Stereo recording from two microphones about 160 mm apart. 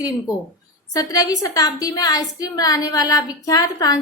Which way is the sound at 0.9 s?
25° left (ahead or behind).